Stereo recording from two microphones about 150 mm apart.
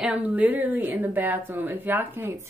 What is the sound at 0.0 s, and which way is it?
A woman's voice, 10° right (ahead or behind).